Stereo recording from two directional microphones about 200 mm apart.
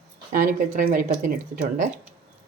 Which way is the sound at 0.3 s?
40° right (ahead or behind).